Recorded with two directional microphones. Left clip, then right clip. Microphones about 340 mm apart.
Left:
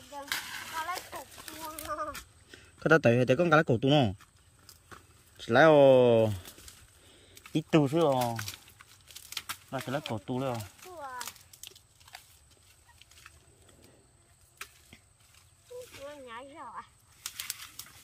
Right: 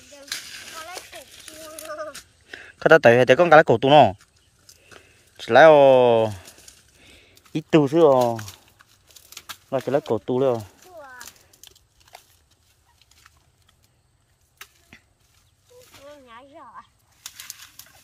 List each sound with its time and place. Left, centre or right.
2.5 s speech: centre
5.4 s speech: centre
7.2 s a sound: centre
7.7 s speech: centre
8.4 s crumpling: centre
9.7 s speech: right
10.2 s speech: centre
11.0 s a sound: centre
16.3 s a sound: centre